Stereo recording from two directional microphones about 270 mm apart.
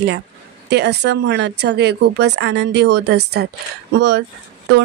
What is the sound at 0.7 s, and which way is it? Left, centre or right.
Speech, right.